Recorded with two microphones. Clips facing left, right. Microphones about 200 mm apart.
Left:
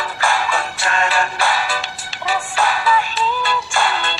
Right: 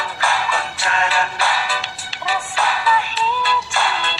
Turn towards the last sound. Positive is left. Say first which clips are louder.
# left 2 dB
turn(degrees=50)  # may be behind; listen again after turning